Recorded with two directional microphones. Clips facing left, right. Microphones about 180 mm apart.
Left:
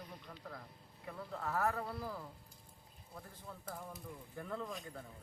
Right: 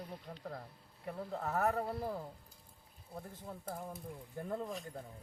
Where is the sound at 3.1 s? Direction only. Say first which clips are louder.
Right 5 dB; 40° right (ahead or behind).